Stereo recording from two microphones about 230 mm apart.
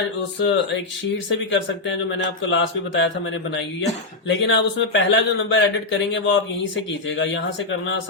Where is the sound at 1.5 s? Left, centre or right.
Left.